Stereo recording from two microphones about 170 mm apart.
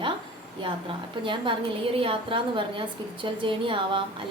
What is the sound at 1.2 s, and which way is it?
A woman's voice, 30° right (ahead or behind).